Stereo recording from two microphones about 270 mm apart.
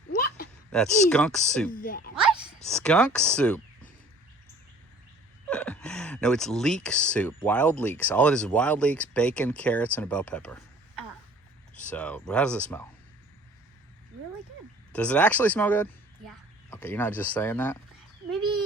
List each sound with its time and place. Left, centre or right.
0.1 s a sound: left
0.7 s speech: centre
1.7 s speech: left
2.6 s speech: centre
5.5 s speech: centre
11.7 s speech: centre
14.9 s speech: centre
18.3 s a sound: centre